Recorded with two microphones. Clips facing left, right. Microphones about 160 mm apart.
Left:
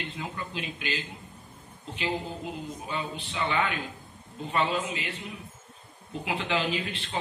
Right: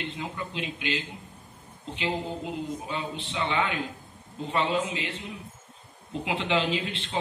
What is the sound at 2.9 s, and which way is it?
Speech, 25° right (ahead or behind).